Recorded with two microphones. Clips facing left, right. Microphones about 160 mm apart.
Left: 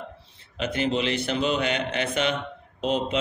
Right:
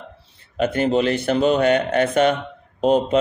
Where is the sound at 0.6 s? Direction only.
45° right (ahead or behind).